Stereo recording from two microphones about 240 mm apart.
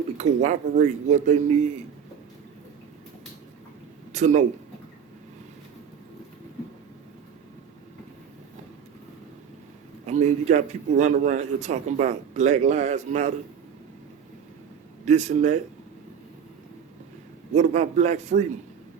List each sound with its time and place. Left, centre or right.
0.2 s a man's voice: right
4.1 s speech: right
10.1 s a man's voice: right
15.0 s a man's voice: right
17.5 s a man's voice: right